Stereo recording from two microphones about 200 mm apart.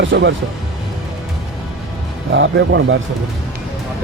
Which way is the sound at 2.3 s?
65° right (ahead or behind).